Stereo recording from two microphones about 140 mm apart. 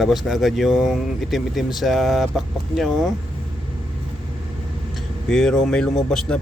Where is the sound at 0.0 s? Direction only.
Centre (ahead or behind).